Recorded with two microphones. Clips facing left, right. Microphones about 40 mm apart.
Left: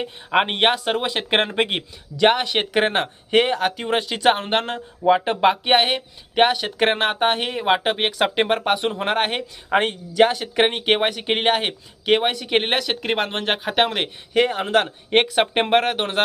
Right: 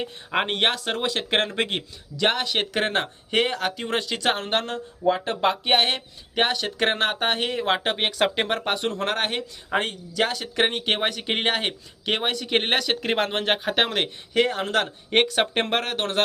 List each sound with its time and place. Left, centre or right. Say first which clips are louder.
0.0 s speech: left 5 dB; left